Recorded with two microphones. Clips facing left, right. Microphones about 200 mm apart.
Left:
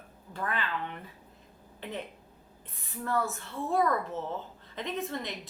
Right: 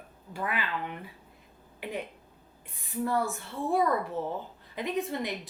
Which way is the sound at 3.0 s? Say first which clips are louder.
Right 1 dB; 15° right (ahead or behind).